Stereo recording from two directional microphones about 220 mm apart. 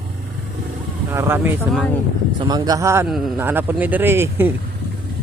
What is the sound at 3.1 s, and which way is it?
Speech, centre (ahead or behind).